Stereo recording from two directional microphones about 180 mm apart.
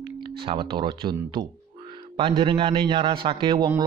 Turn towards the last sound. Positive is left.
turn(degrees=-25)  # may be behind; listen again after turning